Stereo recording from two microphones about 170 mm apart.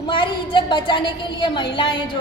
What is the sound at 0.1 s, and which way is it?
A woman's voice, 30° left (ahead or behind).